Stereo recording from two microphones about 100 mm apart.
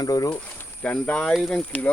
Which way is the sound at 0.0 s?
40° left (ahead or behind).